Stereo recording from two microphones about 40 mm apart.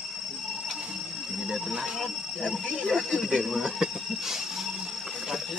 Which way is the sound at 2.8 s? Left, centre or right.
Centre.